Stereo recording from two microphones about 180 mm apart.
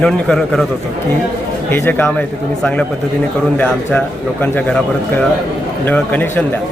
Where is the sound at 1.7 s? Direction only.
10° left (ahead or behind).